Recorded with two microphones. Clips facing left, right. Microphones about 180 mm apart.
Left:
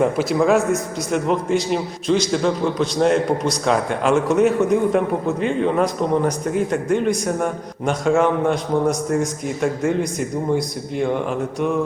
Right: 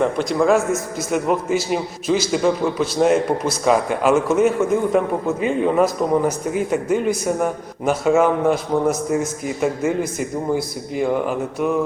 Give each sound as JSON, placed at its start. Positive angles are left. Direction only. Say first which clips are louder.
{"t": 0.0, "sound": "a man's voice", "louder": "left 1 dB", "side_deg": 5}